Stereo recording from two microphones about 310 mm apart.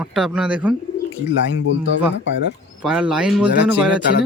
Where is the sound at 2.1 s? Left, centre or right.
Left.